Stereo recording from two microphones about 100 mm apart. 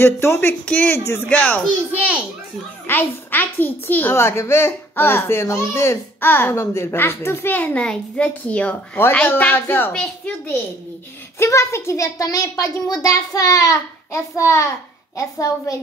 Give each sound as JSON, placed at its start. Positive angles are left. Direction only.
{"t": 0.0, "sound": "a child's voice", "side_deg": 25}
{"t": 1.0, "sound": "a child's voice", "side_deg": 25}
{"t": 2.0, "sound": "a child's voice", "side_deg": -10}
{"t": 2.9, "sound": "a child's voice", "side_deg": 20}
{"t": 11.3, "sound": "a child's voice", "side_deg": 30}